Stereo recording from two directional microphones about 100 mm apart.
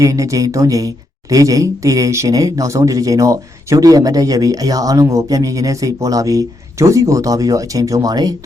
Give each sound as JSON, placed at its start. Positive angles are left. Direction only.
{"t": 0.0, "sound": "speech", "side_deg": -35}